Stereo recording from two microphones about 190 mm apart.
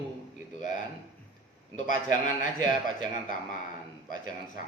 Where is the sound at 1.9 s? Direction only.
45° left (ahead or behind).